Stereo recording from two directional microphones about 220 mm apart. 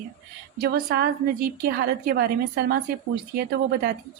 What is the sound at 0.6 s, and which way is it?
Speech, 45° right (ahead or behind).